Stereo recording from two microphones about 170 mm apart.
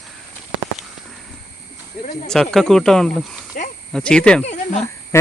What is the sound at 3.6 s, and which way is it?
Cricket, 55° left (ahead or behind).